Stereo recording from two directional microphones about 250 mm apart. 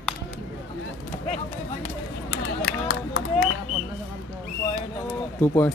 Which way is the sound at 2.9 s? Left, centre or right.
Left.